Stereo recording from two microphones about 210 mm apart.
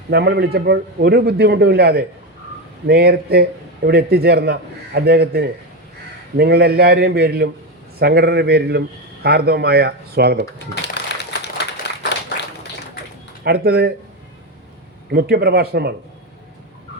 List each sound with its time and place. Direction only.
0.1 s a man's voice: 50° right (ahead or behind)
10.9 s a sound: 55° left (ahead or behind)
13.4 s a man's voice: 50° right (ahead or behind)
15.1 s a man's voice: 45° right (ahead or behind)